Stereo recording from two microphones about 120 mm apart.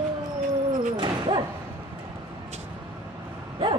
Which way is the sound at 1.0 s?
40° right (ahead or behind).